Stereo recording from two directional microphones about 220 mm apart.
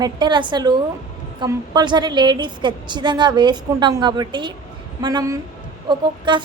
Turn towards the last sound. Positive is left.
turn(degrees=-20)  # may be behind; listen again after turning